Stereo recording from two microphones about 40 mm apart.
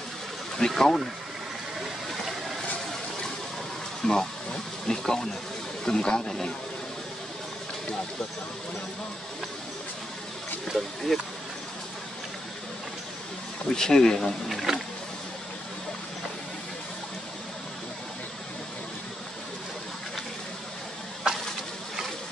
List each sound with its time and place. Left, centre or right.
0.6 s speech: centre
1.8 s a sound: centre
4.0 s speech: centre
10.7 s speech: centre
13.7 s speech: centre
14.7 s wild animals: centre